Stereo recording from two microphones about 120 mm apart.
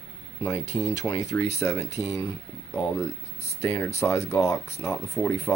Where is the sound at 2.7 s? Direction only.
5° left (ahead or behind).